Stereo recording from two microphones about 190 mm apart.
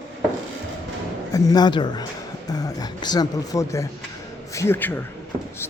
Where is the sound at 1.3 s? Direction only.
20° left (ahead or behind).